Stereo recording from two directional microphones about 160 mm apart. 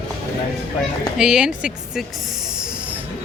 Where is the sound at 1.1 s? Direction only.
5° right (ahead or behind).